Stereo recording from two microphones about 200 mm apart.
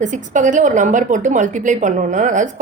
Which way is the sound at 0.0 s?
40° right (ahead or behind).